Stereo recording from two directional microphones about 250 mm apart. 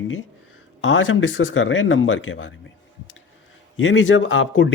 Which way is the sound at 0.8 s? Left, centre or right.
Left.